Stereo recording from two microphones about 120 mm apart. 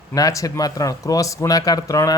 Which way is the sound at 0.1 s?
30° left (ahead or behind).